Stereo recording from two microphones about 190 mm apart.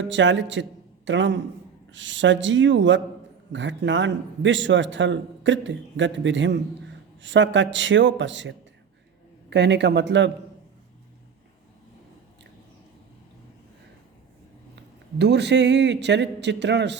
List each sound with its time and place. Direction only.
0.0 s a man's voice: 70° right (ahead or behind)
14.8 s speech: 65° right (ahead or behind)